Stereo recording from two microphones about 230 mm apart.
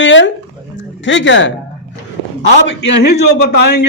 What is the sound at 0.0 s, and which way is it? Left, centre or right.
A man's voice, left.